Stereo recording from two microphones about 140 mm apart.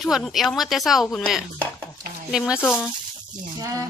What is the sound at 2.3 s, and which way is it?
Speech, 5° right (ahead or behind).